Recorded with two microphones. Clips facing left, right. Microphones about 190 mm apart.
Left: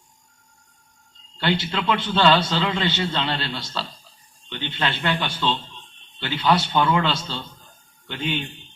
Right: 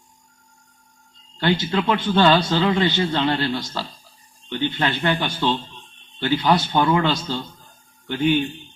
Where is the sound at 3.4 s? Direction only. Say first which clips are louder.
Right 6 dB; 45° right (ahead or behind).